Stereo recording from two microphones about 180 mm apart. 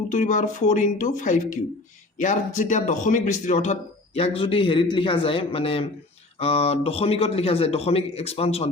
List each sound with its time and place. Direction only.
0.1 s a man's voice: 45° left (ahead or behind)